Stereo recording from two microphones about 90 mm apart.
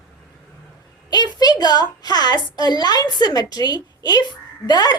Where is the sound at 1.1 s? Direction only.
50° left (ahead or behind).